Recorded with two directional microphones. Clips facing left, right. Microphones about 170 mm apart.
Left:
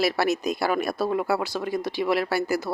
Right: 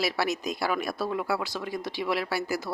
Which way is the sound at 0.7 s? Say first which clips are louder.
Left 4 dB; 45° left (ahead or behind).